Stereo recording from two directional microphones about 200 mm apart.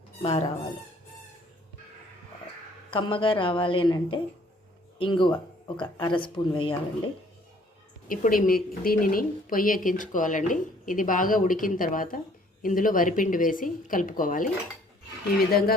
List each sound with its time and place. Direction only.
0.2 s speech: 30° left (ahead or behind)
2.9 s speech: 25° left (ahead or behind)
8.0 s speech: 45° left (ahead or behind)